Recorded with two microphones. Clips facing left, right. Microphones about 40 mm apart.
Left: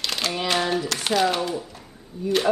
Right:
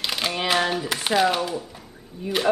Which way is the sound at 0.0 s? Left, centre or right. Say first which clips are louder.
Right 1 dB; centre.